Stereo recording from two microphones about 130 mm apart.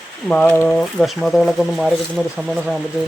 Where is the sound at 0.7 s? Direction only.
Centre (ahead or behind).